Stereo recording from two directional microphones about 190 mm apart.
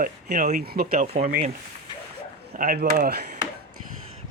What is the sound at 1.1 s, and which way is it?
Speech, 35° right (ahead or behind).